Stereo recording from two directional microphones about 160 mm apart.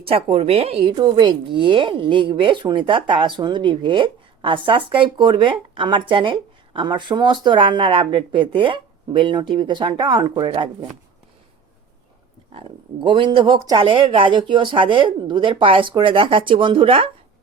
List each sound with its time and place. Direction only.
0.0 s a woman's voice: 35° right (ahead or behind)
12.5 s a woman's voice: 35° right (ahead or behind)